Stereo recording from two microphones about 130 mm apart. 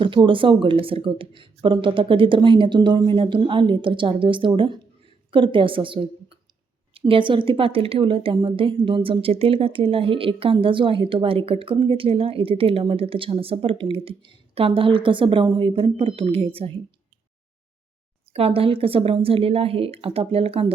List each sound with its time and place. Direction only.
0.0 s a woman's voice: 40° right (ahead or behind)
18.3 s a woman's voice: 45° right (ahead or behind)